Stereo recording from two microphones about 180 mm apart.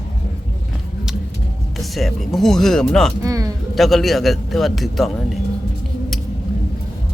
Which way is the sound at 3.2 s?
20° right (ahead or behind).